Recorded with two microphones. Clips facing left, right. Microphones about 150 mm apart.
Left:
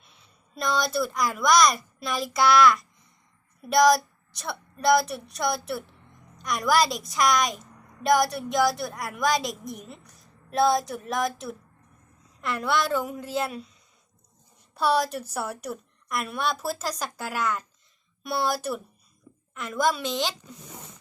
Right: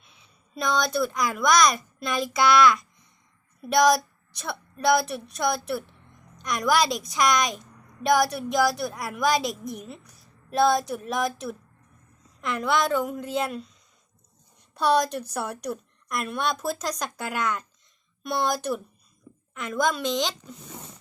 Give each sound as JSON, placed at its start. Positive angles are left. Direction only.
{"t": 0.0, "sound": "a woman's voice", "side_deg": 0}
{"t": 14.8, "sound": "a woman's voice", "side_deg": 5}